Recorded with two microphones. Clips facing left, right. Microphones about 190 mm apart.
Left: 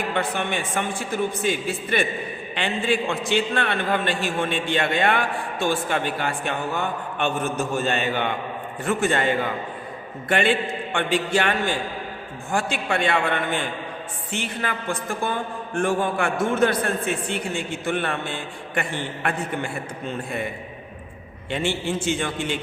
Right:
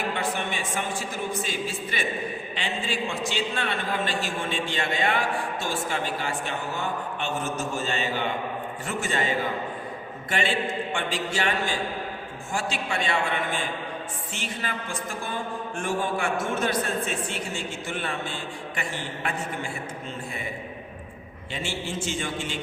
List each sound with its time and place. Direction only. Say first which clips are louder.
0.1 s a man's voice: left 4 dB; 60° left (ahead or behind)
21.5 s a man's voice: left 7 dB; 60° left (ahead or behind)